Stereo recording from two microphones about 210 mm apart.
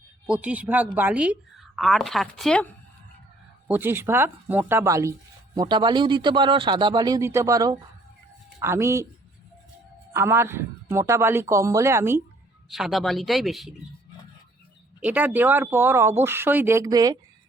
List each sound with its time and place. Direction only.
0.3 s a woman's voice: 5° right (ahead or behind)
3.7 s speech: 10° right (ahead or behind)
10.1 s speech: 10° right (ahead or behind)
12.7 s a woman's voice: centre (ahead or behind)
15.0 s speech: 5° right (ahead or behind)